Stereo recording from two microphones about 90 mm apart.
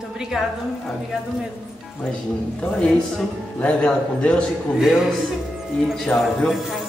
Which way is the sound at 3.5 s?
15° left (ahead or behind).